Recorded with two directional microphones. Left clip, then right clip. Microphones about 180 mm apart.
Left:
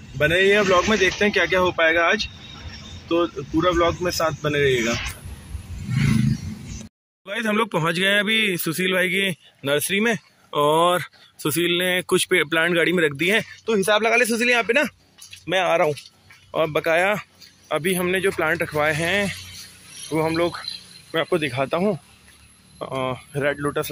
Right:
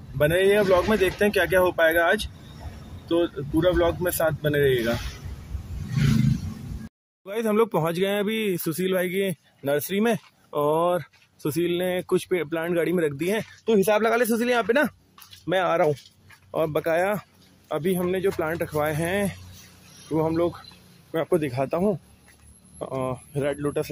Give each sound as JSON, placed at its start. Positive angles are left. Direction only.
{"t": 0.2, "sound": "a man's voice", "side_deg": 0}
{"t": 7.2, "sound": "a man's voice", "side_deg": -5}
{"t": 10.6, "sound": "a man's voice", "side_deg": 0}
{"t": 13.7, "sound": "a man's voice", "side_deg": -30}
{"t": 16.5, "sound": "a man's voice", "side_deg": -10}